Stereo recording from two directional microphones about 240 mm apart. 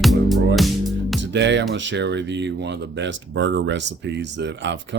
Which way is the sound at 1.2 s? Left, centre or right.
Right.